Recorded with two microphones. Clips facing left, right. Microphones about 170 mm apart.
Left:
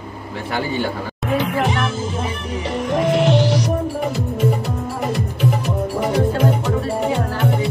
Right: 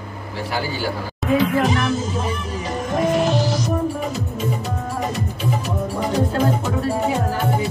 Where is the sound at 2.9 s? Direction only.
70° left (ahead or behind).